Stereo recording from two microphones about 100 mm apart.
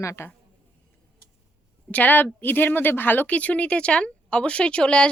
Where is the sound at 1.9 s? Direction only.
15° left (ahead or behind).